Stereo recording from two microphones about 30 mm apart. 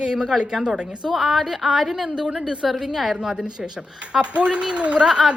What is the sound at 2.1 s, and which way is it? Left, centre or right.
Speech, right.